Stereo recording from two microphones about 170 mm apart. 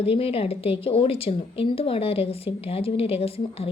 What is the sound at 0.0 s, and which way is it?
A woman's voice, 35° left (ahead or behind).